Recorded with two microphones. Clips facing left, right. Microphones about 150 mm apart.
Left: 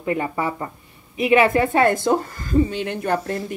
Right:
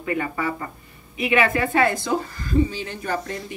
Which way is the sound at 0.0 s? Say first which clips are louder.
Left 2 dB; 30° left (ahead or behind).